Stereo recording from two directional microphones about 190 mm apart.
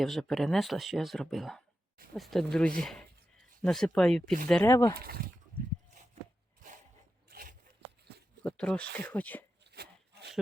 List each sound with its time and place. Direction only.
0.0 s speech: centre (ahead or behind)
4.9 s speech: 55° right (ahead or behind)
7.3 s a sound: 50° right (ahead or behind)
8.1 s shuffling cards: 60° right (ahead or behind)
8.4 s speech: 5° left (ahead or behind)
9.6 s a sound: 60° right (ahead or behind)